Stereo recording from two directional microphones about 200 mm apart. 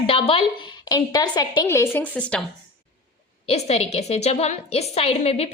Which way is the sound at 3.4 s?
30° left (ahead or behind).